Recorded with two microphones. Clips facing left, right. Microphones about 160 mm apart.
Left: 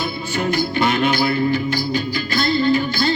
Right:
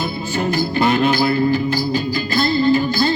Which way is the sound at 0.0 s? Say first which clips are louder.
Right 1 dB; 40° right (ahead or behind).